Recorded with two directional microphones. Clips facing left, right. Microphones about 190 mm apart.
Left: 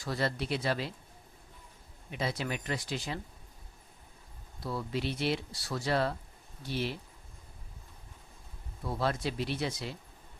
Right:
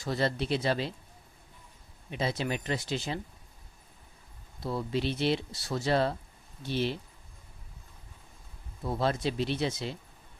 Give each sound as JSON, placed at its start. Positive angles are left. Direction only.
{"t": 0.0, "sound": "speech", "side_deg": -25}
{"t": 2.0, "sound": "speech", "side_deg": -25}
{"t": 4.6, "sound": "speech", "side_deg": -25}
{"t": 8.8, "sound": "speech", "side_deg": -25}